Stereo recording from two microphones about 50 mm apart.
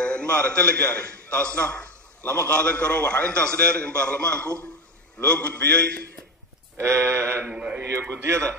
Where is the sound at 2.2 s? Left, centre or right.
Left.